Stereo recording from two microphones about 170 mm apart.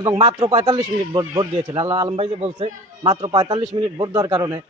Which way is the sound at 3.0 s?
20° right (ahead or behind).